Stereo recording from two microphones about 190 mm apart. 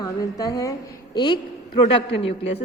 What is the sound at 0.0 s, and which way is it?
A woman's voice, 20° left (ahead or behind).